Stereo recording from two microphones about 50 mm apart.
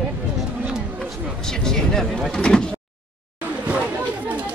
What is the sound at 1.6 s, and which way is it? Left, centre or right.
Speech, centre.